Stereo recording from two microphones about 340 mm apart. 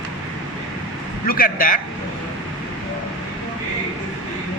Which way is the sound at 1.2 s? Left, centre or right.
Left.